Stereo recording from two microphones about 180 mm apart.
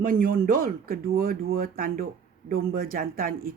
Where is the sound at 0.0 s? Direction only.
55° right (ahead or behind).